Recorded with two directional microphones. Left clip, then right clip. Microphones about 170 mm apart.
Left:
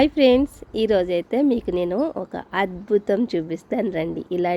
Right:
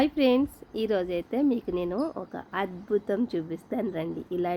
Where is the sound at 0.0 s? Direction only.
30° left (ahead or behind).